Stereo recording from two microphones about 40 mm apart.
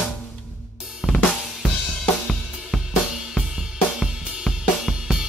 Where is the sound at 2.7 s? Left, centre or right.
Centre.